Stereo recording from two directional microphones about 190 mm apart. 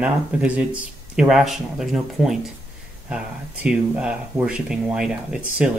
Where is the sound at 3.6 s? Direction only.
5° right (ahead or behind).